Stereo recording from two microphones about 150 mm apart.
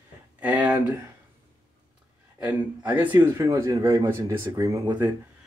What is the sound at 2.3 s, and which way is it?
Speech, 10° right (ahead or behind).